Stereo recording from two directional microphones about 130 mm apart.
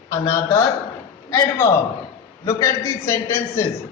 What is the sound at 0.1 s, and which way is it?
A man's voice, 25° left (ahead or behind).